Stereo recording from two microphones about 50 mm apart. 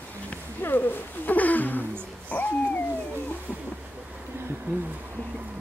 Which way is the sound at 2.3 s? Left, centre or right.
Left.